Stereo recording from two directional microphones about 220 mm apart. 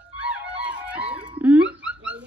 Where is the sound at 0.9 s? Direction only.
5° right (ahead or behind).